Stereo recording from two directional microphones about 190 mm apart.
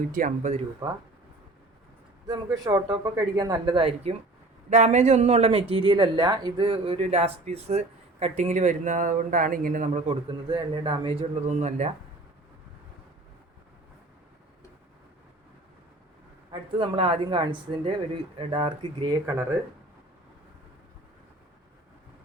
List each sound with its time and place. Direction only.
0.0 s speech: 45° right (ahead or behind)
0.5 s speech: 20° right (ahead or behind)
2.2 s speech: 20° right (ahead or behind); by 10.2 s 40° right (ahead or behind)
10.2 s speech: 25° right (ahead or behind)
16.5 s speech: 25° right (ahead or behind)
19.2 s speech: 15° right (ahead or behind)